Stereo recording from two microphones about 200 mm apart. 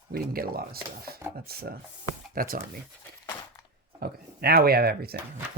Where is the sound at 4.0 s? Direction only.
50° right (ahead or behind).